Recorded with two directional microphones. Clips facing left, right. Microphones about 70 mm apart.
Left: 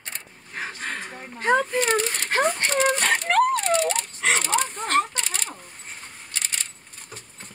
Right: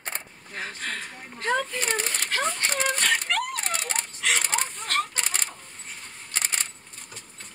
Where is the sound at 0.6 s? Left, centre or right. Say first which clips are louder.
Left 2 dB; centre.